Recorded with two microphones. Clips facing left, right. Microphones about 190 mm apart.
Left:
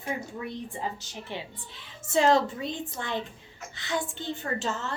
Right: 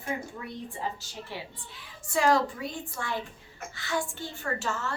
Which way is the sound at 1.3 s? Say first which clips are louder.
Left 4 dB; 25° left (ahead or behind).